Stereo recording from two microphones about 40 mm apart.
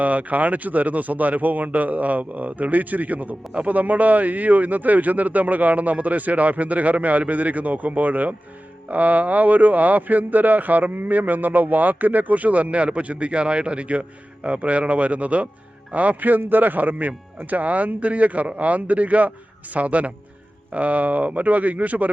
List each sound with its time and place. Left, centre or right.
0.0 s a man's voice: right
16.4 s a man's voice: right